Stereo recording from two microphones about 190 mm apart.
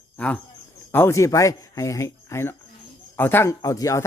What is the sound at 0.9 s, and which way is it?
A child's voice, 10° left (ahead or behind).